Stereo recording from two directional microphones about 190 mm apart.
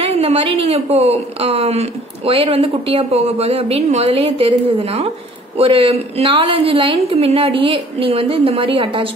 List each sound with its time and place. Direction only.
0.0 s a woman's voice: 30° right (ahead or behind)